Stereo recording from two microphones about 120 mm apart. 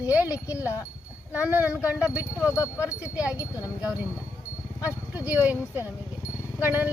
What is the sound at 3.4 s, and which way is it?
Speech, 30° left (ahead or behind).